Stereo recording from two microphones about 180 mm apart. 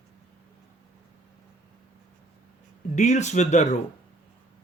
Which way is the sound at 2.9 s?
40° left (ahead or behind).